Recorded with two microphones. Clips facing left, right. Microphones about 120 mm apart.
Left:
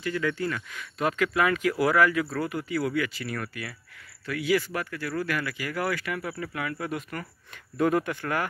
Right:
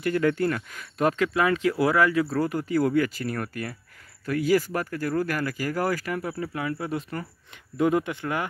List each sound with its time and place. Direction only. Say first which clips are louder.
0.0 s speech: right 5 dB; 50° right (ahead or behind)
1.2 s speech: left 2 dB; 25° right (ahead or behind)
2.3 s speech: right 5 dB; 40° right (ahead or behind); by 8.5 s 20° right (ahead or behind)